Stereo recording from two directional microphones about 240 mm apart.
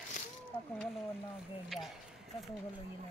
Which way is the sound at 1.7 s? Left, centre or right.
Centre.